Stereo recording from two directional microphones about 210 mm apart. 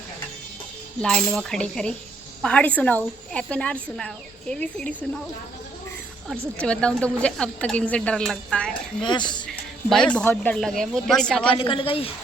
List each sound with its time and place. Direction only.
1.0 s speech: centre (ahead or behind)
6.6 s speech: 5° left (ahead or behind)
9.0 s a woman's voice: 20° left (ahead or behind)
9.5 s speech: 5° left (ahead or behind)
11.5 s a woman's voice: 25° left (ahead or behind)